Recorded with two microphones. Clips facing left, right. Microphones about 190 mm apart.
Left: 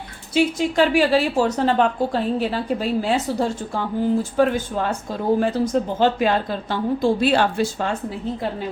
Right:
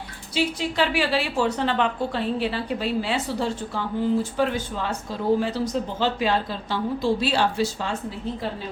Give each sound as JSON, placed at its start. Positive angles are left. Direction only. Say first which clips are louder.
{"t": 0.3, "sound": "a woman's voice", "louder": "left 6 dB", "side_deg": 45}